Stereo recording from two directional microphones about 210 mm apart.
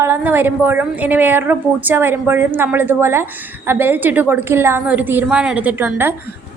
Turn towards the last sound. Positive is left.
turn(degrees=-10)  # may be behind; listen again after turning